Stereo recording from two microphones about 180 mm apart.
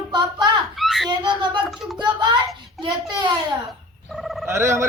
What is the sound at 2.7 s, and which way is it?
Speech, 25° right (ahead or behind).